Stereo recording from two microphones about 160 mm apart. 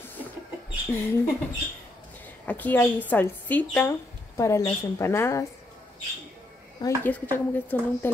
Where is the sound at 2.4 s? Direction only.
10° left (ahead or behind).